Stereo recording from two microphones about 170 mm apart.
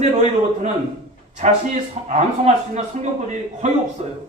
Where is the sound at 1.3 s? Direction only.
45° right (ahead or behind).